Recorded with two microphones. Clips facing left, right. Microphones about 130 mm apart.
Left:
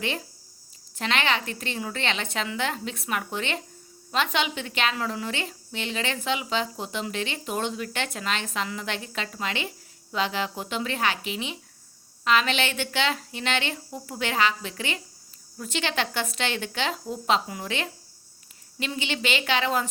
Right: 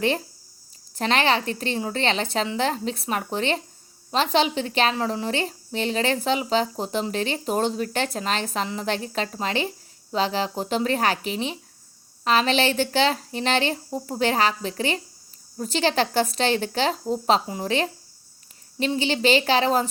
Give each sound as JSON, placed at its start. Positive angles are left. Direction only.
{"t": 0.9, "sound": "a woman's voice", "side_deg": -35}